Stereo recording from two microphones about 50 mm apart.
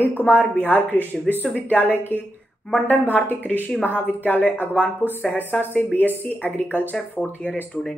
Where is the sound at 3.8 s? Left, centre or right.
Left.